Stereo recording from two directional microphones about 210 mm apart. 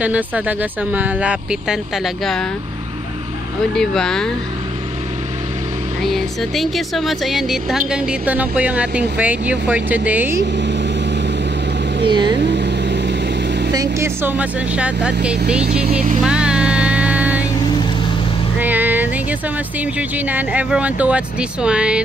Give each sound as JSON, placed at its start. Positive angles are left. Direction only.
{"t": 0.0, "sound": "speech", "side_deg": -5}
{"t": 3.7, "sound": "speech", "side_deg": 0}
{"t": 6.0, "sound": "speech", "side_deg": 0}
{"t": 10.4, "sound": "vehicle", "side_deg": -55}
{"t": 12.1, "sound": "speech", "side_deg": -20}
{"t": 12.4, "sound": "vehicle", "side_deg": -55}
{"t": 13.7, "sound": "speech", "side_deg": -15}
{"t": 16.2, "sound": "vehicle", "side_deg": -5}
{"t": 18.6, "sound": "speech", "side_deg": -10}